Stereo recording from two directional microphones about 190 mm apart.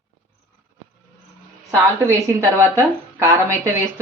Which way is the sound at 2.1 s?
15° right (ahead or behind).